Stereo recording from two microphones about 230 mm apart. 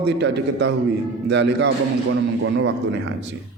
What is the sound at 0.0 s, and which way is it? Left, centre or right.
Speech, right.